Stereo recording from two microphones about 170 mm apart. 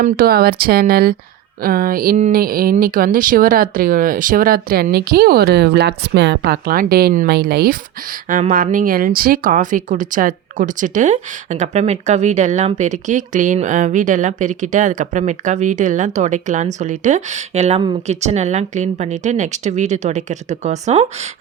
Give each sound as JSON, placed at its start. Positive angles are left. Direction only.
{"t": 0.0, "sound": "speech", "side_deg": -60}
{"t": 8.3, "sound": "speech", "side_deg": -45}